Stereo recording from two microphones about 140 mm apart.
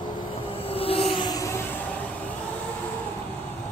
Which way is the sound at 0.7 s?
45° left (ahead or behind).